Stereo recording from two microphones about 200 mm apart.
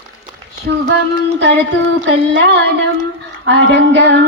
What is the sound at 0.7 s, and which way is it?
Child singing, 55° right (ahead or behind).